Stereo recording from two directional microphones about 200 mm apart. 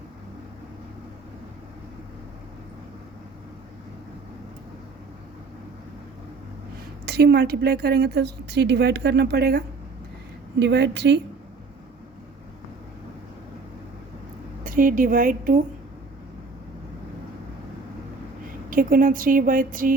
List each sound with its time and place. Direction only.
7.0 s a woman's voice: 55° right (ahead or behind)
14.6 s a woman's voice: 45° right (ahead or behind)
18.7 s speech: 45° right (ahead or behind)